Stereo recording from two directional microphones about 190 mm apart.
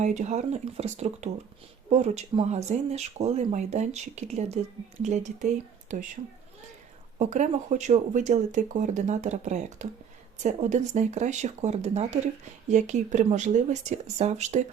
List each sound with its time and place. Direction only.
0.0 s speech: 40° right (ahead or behind)
7.2 s speech: 40° right (ahead or behind)